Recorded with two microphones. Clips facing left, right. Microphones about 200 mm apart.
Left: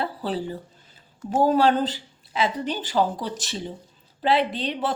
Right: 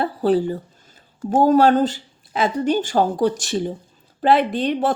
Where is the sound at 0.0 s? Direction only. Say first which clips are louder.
Right 9 dB; 50° right (ahead or behind).